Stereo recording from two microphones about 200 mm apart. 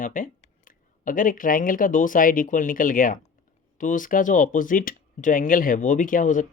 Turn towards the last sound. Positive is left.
turn(degrees=40)  # may be behind; listen again after turning